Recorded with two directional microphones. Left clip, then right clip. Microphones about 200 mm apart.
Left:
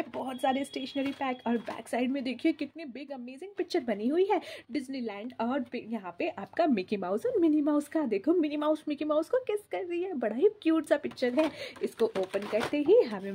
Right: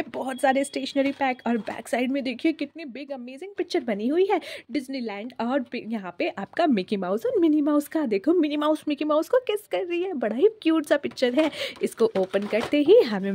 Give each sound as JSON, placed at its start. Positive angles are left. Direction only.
{"t": 0.1, "sound": "speech", "side_deg": -40}